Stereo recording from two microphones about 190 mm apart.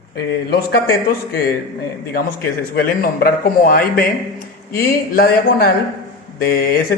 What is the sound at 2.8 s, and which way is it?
Speech, 50° left (ahead or behind).